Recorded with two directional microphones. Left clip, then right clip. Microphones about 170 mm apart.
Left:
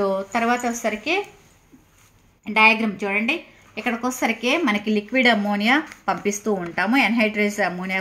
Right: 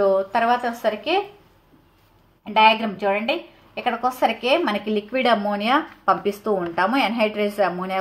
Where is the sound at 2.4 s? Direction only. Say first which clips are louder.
Even; 15° left (ahead or behind).